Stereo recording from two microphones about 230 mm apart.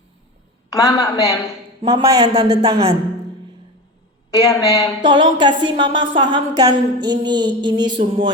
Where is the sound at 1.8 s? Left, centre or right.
Centre.